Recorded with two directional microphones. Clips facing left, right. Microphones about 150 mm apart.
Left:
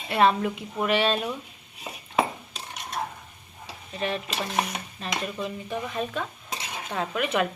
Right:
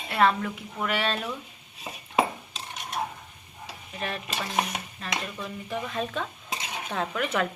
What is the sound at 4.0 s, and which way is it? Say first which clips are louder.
A woman's voice: left 4 dB; 20° left (ahead or behind).